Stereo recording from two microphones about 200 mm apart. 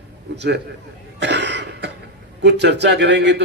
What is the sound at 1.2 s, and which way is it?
Cough, 60° right (ahead or behind).